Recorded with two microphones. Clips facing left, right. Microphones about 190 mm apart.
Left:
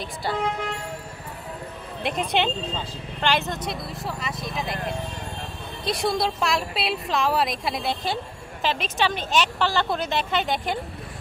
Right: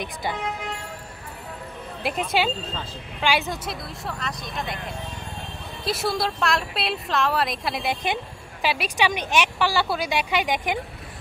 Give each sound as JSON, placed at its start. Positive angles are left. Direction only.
{"t": 0.0, "sound": "speech", "side_deg": -20}
{"t": 2.0, "sound": "a woman's voice", "side_deg": -5}
{"t": 5.9, "sound": "a woman's voice", "side_deg": 0}
{"t": 7.9, "sound": "speech", "side_deg": -20}